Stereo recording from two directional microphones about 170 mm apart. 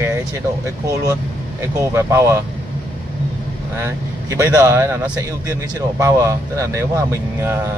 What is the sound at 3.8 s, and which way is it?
A man's voice, 15° right (ahead or behind).